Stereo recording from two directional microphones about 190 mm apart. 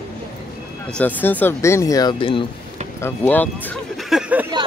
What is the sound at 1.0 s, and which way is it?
Speech, 10° left (ahead or behind).